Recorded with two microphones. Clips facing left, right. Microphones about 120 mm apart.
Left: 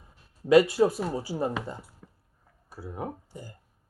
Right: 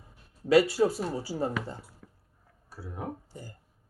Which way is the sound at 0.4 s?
15° left (ahead or behind).